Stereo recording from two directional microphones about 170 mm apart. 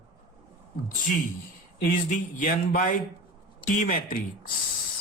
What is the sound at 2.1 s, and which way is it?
Speech, 50° left (ahead or behind).